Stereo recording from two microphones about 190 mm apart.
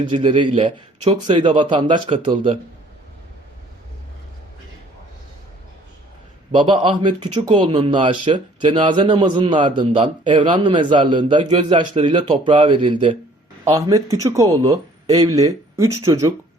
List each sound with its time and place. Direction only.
0.0 s speech: 25° right (ahead or behind)
6.5 s speech: 25° right (ahead or behind)